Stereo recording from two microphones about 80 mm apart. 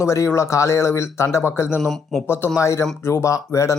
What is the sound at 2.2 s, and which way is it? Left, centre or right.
Speech, left.